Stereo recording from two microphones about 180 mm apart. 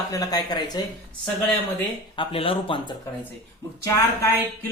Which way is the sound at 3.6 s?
15° left (ahead or behind).